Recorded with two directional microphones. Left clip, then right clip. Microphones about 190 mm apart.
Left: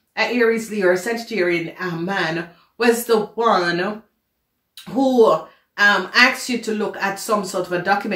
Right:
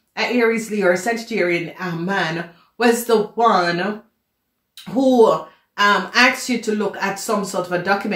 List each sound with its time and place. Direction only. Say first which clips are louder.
0.1 s a woman's voice: even; 20° right (ahead or behind)
4.9 s a woman's voice: right 1 dB; 20° right (ahead or behind)